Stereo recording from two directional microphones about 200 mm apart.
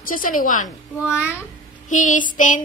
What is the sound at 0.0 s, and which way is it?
Speech, 45° left (ahead or behind).